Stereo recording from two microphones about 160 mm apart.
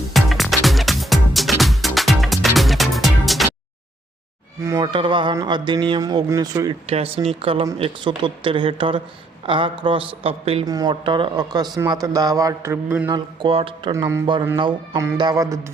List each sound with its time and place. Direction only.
0.1 s music: centre (ahead or behind)
4.6 s a man's voice: 20° right (ahead or behind)
4.9 s a man's voice: 30° right (ahead or behind)
6.8 s speech: 35° right (ahead or behind)
10.7 s a man's voice: 25° right (ahead or behind)
13.1 s a man's voice: 30° right (ahead or behind)
13.9 s a man's voice: 20° right (ahead or behind)
14.6 s a man's voice: 30° right (ahead or behind)